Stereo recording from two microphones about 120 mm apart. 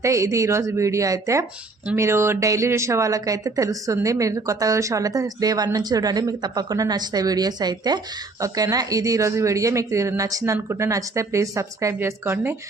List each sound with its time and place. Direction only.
0.0 s a woman's voice: 25° right (ahead or behind)